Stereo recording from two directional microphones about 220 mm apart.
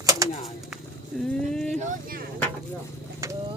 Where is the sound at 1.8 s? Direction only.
40° right (ahead or behind).